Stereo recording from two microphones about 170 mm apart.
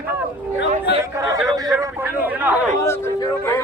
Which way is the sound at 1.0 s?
20° right (ahead or behind).